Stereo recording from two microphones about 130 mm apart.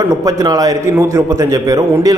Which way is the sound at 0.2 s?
25° right (ahead or behind).